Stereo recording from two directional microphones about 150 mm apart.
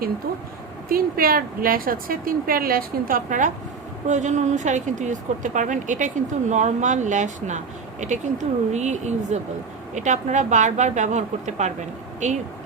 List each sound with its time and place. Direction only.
0.9 s a woman's voice: 75° right (ahead or behind); by 12.4 s 55° right (ahead or behind)